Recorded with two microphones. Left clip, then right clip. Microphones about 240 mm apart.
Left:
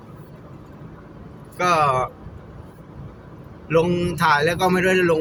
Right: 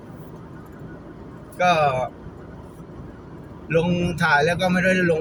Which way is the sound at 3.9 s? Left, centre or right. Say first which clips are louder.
Left 1 dB; centre.